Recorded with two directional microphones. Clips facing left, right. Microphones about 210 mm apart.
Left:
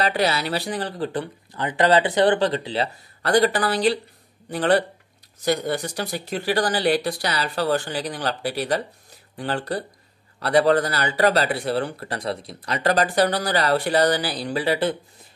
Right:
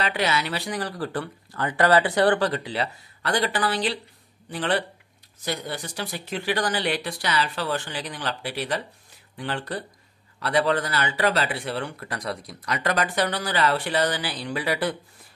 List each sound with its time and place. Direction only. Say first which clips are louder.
0.0 s speech: left 3 dB; 35° left (ahead or behind)
3.2 s speech: left 6 dB; 40° left (ahead or behind)